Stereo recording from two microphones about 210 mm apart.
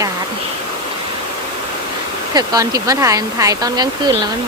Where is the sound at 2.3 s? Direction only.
15° right (ahead or behind).